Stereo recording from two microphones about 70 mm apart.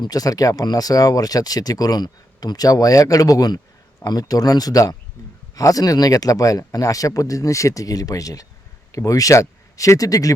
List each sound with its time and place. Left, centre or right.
0.0 s speech: left